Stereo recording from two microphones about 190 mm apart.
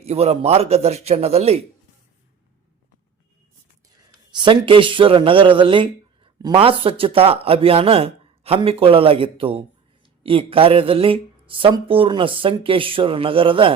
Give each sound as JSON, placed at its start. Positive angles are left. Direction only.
{"t": 0.0, "sound": "a man's voice", "side_deg": -30}
{"t": 4.4, "sound": "speech", "side_deg": -25}